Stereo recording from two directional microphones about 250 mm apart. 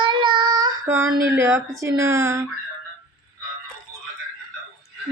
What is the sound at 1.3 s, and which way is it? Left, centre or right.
Speech, centre.